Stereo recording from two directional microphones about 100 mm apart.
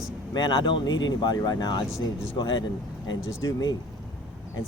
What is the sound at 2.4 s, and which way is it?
Speech, 50° left (ahead or behind).